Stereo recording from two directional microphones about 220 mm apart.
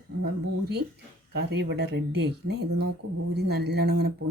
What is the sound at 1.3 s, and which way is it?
Speech, 50° right (ahead or behind).